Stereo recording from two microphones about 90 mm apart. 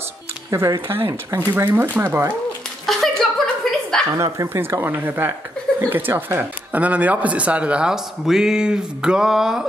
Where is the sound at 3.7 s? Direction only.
5° left (ahead or behind).